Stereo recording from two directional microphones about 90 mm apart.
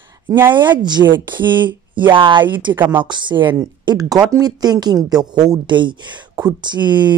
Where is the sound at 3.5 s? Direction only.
45° right (ahead or behind).